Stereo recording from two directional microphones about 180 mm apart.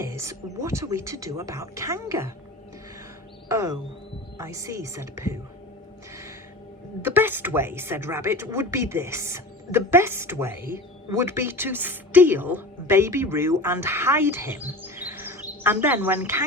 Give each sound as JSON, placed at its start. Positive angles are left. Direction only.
{"t": 0.0, "sound": "speech", "side_deg": -15}
{"t": 3.5, "sound": "speech", "side_deg": -15}
{"t": 7.0, "sound": "speech", "side_deg": -10}